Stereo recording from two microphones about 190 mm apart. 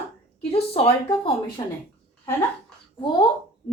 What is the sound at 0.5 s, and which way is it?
Speech, 30° left (ahead or behind).